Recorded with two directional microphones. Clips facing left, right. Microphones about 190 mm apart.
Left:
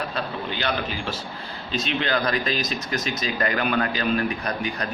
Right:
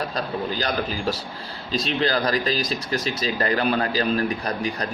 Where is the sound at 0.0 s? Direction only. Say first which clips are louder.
Right 2 dB; 35° right (ahead or behind).